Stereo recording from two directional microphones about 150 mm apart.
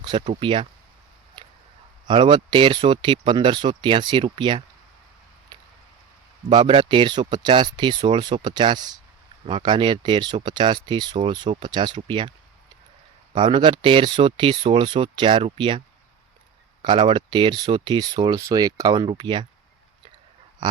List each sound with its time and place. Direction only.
0.3 s speech: 35° right (ahead or behind)
2.0 s speech: 35° right (ahead or behind)
6.5 s speech: 30° right (ahead or behind)
13.3 s speech: 35° right (ahead or behind)
16.8 s speech: 30° right (ahead or behind)
20.6 s a man's voice: 30° right (ahead or behind)